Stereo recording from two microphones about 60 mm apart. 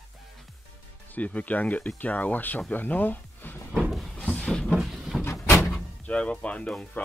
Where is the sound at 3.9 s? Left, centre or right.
Centre.